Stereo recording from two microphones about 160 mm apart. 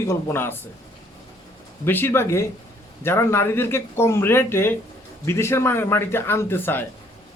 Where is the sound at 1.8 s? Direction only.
15° left (ahead or behind).